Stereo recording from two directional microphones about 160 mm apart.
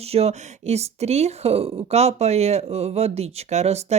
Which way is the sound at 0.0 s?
40° right (ahead or behind).